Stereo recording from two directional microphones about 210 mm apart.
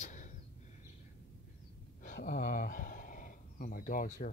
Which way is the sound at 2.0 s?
40° left (ahead or behind).